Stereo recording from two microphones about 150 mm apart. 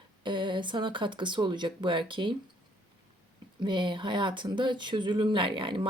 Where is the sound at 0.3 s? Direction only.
30° right (ahead or behind).